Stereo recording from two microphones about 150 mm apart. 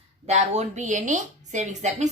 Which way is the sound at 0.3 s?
45° right (ahead or behind).